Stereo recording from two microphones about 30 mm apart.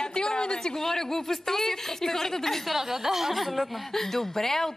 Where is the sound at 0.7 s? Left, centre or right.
Centre.